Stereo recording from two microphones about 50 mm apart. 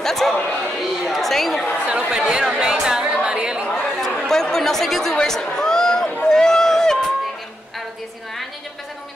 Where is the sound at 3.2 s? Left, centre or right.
Centre.